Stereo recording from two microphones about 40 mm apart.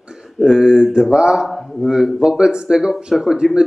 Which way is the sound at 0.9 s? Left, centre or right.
Centre.